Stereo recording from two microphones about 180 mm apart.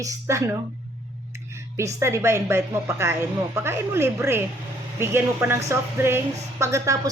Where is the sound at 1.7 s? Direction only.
15° right (ahead or behind).